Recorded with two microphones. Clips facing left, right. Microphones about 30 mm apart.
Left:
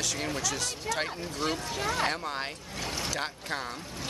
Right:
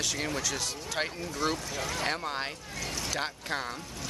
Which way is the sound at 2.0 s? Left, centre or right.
Centre.